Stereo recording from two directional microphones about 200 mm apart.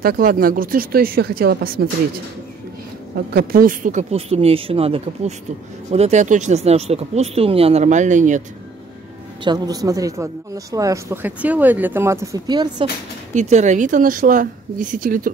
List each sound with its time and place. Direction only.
0.0 s speech: 45° right (ahead or behind)
3.3 s speech: 45° right (ahead or behind)
9.4 s a woman's voice: 20° right (ahead or behind)
13.3 s speech: 35° right (ahead or behind)